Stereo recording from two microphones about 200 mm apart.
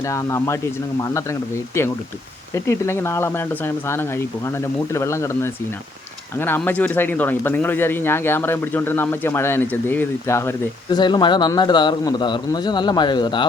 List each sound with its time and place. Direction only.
0.0 s speech: 15° left (ahead or behind)